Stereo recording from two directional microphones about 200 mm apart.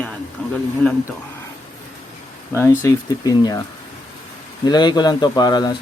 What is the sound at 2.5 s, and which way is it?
Speech, 15° left (ahead or behind).